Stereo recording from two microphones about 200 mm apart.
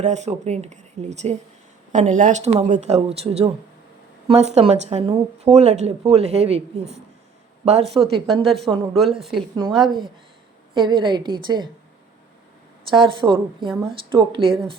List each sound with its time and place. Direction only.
0.0 s speech: 35° right (ahead or behind)
8.4 s a woman's voice: centre (ahead or behind)
10.8 s a woman's voice: 25° right (ahead or behind)
12.9 s a woman's voice: 25° right (ahead or behind)